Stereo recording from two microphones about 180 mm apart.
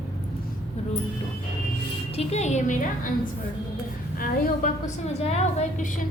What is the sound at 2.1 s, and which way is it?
Speech, 40° left (ahead or behind).